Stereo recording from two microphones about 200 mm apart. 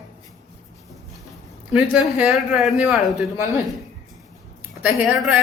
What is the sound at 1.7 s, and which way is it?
A man's voice, 5° right (ahead or behind).